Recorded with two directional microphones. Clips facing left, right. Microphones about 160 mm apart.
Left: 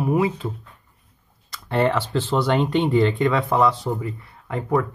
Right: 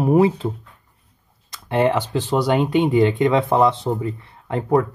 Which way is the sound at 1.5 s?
15° right (ahead or behind).